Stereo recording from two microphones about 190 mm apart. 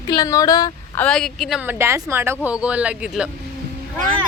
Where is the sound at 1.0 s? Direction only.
5° left (ahead or behind).